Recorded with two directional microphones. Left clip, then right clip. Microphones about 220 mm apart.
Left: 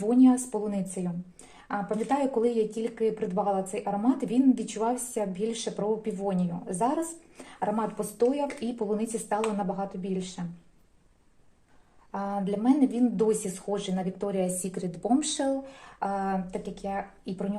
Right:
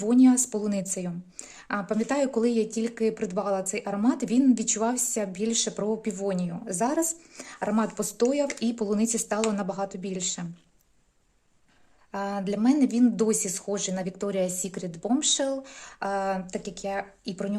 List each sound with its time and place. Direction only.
0.0 s speech: 35° right (ahead or behind)
12.1 s speech: 45° right (ahead or behind); by 15.4 s 25° right (ahead or behind)
16.0 s speech: 45° right (ahead or behind)